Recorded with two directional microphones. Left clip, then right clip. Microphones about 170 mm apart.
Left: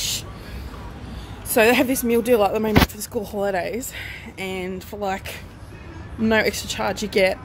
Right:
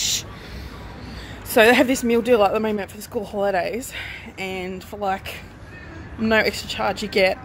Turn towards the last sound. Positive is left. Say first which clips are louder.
# even
turn(degrees=10)  # may be behind; listen again after turning